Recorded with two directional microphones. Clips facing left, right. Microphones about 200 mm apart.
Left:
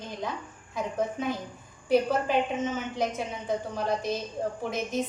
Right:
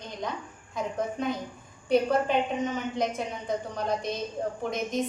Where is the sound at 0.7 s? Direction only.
Centre (ahead or behind).